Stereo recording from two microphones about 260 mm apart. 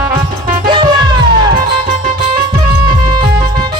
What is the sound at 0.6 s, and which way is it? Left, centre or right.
Music, centre.